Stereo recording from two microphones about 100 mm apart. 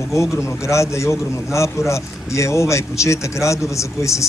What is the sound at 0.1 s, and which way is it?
A man's voice, 30° left (ahead or behind).